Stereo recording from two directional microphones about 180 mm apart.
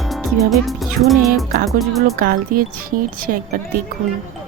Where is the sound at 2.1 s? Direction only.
55° right (ahead or behind).